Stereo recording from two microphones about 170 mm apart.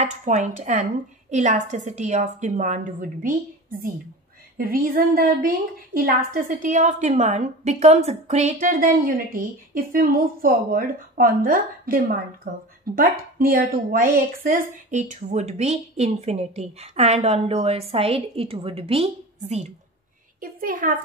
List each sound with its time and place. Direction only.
0.0 s a woman's voice: 45° right (ahead or behind); by 12.2 s 60° right (ahead or behind)
12.4 s a woman's voice: 45° right (ahead or behind)
12.8 s a woman's voice: 55° right (ahead or behind); by 19.7 s 40° right (ahead or behind)
20.3 s a woman's voice: 55° right (ahead or behind)